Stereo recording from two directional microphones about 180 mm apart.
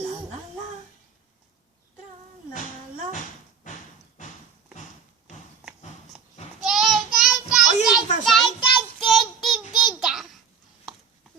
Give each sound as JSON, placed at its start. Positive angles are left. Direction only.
{"t": 6.7, "sound": "child singing", "side_deg": 0}